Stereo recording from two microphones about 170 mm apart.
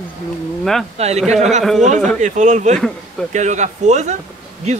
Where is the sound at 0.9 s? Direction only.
40° right (ahead or behind).